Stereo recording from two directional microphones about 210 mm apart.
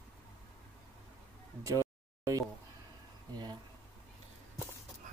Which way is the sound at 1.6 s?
15° right (ahead or behind).